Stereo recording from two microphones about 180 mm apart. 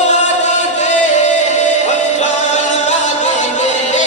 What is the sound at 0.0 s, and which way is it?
Music, 40° left (ahead or behind).